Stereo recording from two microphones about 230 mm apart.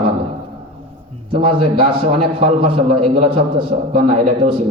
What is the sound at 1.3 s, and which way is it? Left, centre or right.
A man's voice, right.